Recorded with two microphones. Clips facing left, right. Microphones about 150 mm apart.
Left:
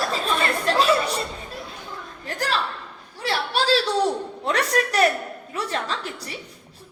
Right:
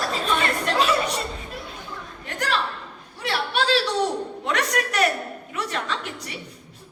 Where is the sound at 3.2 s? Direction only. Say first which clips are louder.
Even; 35° left (ahead or behind).